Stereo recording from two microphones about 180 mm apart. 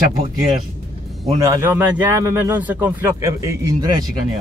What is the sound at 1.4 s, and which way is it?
A man's voice, 15° right (ahead or behind).